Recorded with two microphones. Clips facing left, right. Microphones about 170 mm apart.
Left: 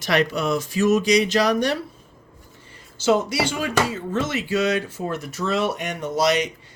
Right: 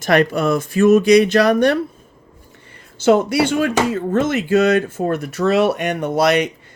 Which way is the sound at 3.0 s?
55° right (ahead or behind).